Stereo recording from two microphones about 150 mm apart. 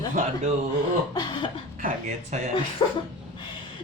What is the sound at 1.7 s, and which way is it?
Speech, 55° right (ahead or behind).